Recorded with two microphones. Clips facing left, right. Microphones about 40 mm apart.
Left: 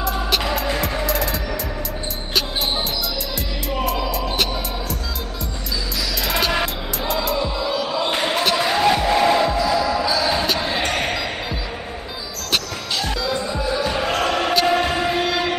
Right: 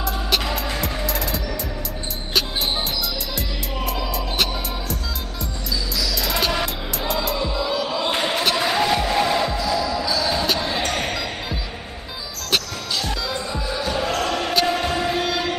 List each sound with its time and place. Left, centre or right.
0.0 s music: centre
3.8 s music: centre
6.2 s music: centre
13.6 s basketball bounce: centre
14.7 s a sound: centre